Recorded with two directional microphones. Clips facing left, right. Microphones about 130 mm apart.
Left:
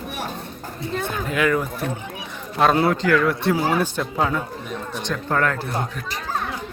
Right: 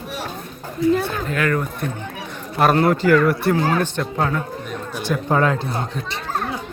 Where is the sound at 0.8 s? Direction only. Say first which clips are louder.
Right 8 dB; 15° left (ahead or behind); by 3.1 s 10° right (ahead or behind).